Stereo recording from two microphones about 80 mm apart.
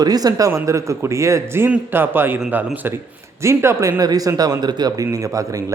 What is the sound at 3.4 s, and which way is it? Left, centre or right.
Speech, right.